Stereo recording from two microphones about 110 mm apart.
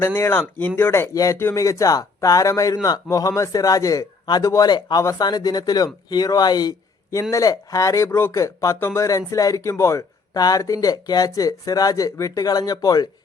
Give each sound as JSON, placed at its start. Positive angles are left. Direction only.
{"t": 0.0, "sound": "a man's voice", "side_deg": 20}